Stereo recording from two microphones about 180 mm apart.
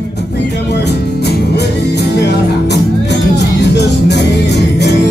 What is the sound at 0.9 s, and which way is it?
Music, 70° left (ahead or behind).